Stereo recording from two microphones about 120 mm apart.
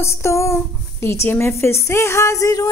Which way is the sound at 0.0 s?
25° left (ahead or behind).